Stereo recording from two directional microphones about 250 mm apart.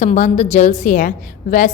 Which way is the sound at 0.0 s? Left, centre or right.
Left.